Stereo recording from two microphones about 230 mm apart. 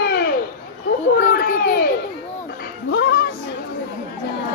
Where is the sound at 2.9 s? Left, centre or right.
Left.